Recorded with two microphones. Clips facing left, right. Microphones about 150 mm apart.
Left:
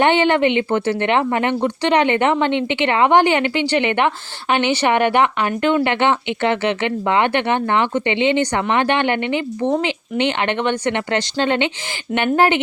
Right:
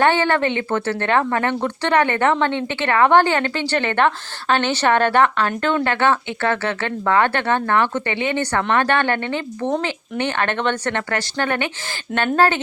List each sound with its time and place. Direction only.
0.0 s a woman's voice: 20° left (ahead or behind)